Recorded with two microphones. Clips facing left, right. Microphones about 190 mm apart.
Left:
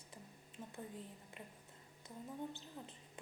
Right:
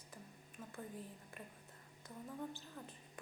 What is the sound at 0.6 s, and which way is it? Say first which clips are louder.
A woman's voice: even; 20° left (ahead or behind).